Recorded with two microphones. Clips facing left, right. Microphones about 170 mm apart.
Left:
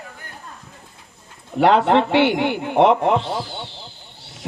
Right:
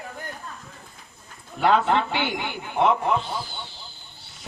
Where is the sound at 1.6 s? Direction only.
75° left (ahead or behind); by 3.7 s 90° left.